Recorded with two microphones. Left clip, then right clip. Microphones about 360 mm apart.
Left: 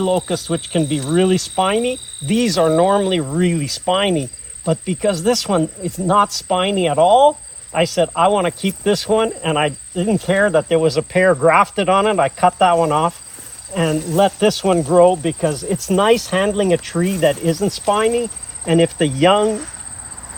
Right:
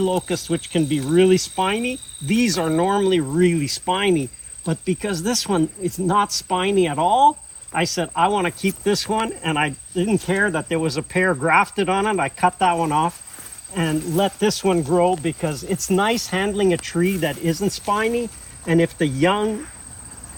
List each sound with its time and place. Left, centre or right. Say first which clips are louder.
0.0 s speech: left 3 dB; centre